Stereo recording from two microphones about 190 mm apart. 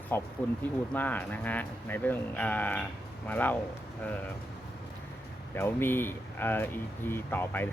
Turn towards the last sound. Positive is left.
turn(degrees=10)  # may be behind; listen again after turning